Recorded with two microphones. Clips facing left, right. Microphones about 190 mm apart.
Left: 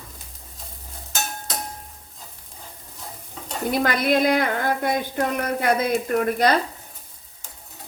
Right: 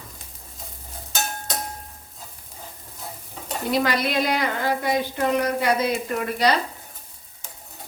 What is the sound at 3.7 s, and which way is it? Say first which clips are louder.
Speech: left 2 dB; 50° left (ahead or behind).